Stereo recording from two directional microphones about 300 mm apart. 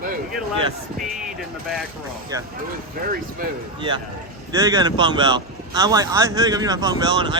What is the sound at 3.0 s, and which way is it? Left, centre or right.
Speech, right.